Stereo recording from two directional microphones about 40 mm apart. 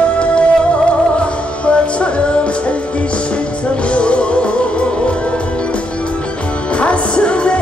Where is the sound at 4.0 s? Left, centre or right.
Left.